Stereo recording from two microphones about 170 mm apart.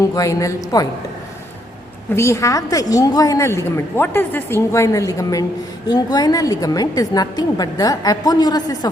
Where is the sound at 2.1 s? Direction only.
15° left (ahead or behind).